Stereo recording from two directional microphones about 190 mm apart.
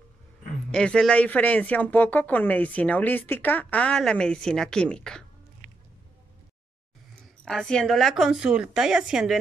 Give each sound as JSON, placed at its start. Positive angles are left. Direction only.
{"t": 0.7, "sound": "speech", "side_deg": 5}
{"t": 5.6, "sound": "music", "side_deg": -50}
{"t": 7.4, "sound": "a woman's voice", "side_deg": 5}